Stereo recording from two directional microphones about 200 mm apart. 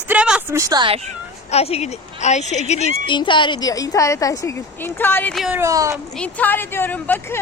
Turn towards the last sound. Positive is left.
turn(degrees=10)  # may be behind; listen again after turning